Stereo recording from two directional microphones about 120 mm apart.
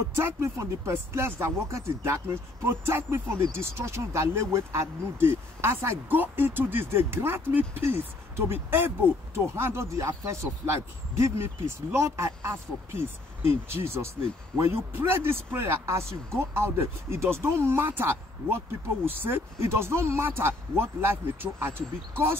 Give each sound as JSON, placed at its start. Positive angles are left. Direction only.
{"t": 0.1, "sound": "speech", "side_deg": -20}